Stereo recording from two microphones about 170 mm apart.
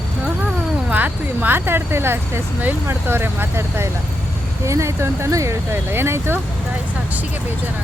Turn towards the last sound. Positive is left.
turn(degrees=-15)  # may be behind; listen again after turning